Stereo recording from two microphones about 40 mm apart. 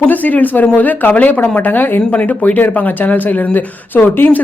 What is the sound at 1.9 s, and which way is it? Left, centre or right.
Speech, left.